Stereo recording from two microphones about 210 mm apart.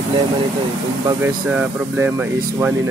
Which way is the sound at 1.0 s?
10° right (ahead or behind).